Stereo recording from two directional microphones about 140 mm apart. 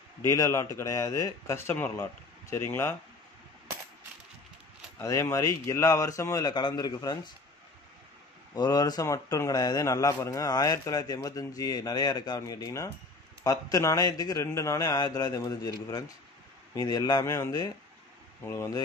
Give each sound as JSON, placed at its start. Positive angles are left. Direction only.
{"t": 0.3, "sound": "a man's voice", "side_deg": 20}
{"t": 4.9, "sound": "a man's voice", "side_deg": 20}
{"t": 8.5, "sound": "a man's voice", "side_deg": 30}